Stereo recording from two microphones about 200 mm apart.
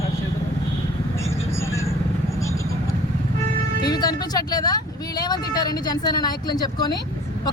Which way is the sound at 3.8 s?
20° left (ahead or behind).